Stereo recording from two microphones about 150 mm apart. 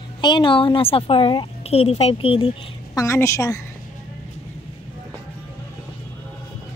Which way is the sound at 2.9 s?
20° left (ahead or behind).